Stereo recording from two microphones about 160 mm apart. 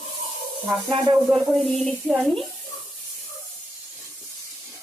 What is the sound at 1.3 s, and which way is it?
Speech, centre (ahead or behind).